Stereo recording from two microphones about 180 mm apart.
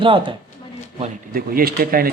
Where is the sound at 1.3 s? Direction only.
55° right (ahead or behind).